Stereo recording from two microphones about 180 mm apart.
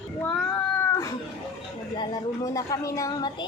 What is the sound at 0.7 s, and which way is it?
Cat, 15° left (ahead or behind).